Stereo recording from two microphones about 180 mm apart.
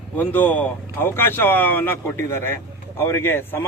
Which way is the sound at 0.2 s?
10° left (ahead or behind).